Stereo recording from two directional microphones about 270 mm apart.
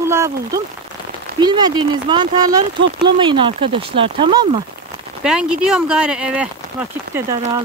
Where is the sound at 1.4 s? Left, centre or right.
Centre.